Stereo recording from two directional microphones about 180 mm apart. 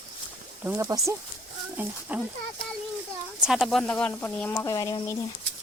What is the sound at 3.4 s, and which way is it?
Speech, centre (ahead or behind).